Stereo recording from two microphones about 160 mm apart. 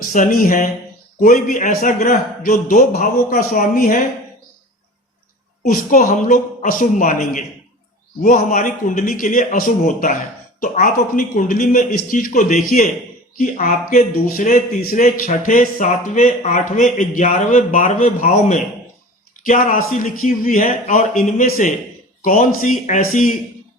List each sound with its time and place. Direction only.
0.0 s a man's voice: 60° left (ahead or behind)
5.6 s a man's voice: 60° left (ahead or behind)